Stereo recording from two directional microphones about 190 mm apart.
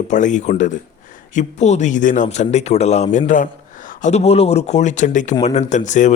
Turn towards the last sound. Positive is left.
turn(degrees=40)  # may be behind; listen again after turning